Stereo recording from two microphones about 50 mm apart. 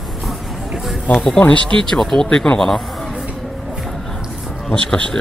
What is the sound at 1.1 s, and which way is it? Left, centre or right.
Speech, centre.